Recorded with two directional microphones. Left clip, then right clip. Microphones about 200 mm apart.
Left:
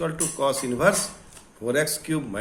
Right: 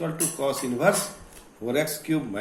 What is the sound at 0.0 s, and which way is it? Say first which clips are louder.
A man's voice: left 3 dB; 55° left (ahead or behind).